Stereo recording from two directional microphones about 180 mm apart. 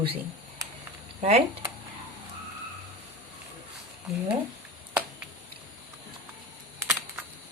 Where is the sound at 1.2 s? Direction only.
35° right (ahead or behind).